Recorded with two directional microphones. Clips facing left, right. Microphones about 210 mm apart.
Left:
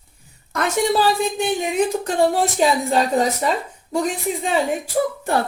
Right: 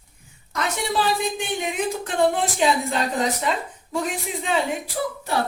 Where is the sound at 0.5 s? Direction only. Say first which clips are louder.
Left 6 dB; 50° left (ahead or behind).